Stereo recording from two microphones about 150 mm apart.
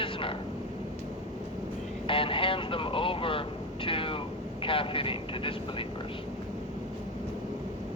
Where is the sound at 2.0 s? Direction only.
35° left (ahead or behind).